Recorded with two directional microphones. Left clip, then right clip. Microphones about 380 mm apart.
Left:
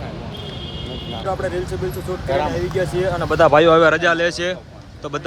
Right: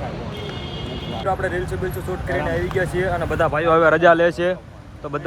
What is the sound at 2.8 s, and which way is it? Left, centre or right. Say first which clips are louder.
Speech: left 3 dB; centre.